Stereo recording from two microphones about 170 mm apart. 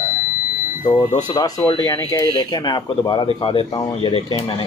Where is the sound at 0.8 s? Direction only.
25° left (ahead or behind).